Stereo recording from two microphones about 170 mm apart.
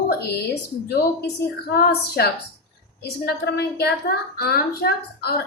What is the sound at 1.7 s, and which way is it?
A woman's voice, 65° left (ahead or behind).